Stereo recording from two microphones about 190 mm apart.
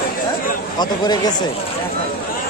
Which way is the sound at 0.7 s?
20° left (ahead or behind).